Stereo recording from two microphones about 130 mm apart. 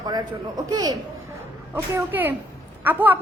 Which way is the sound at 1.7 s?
15° right (ahead or behind).